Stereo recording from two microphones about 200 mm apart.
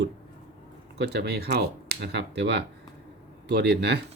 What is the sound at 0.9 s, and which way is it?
Speech, 55° right (ahead or behind).